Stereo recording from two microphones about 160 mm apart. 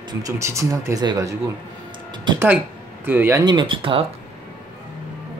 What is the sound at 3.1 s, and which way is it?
Speech, 15° right (ahead or behind).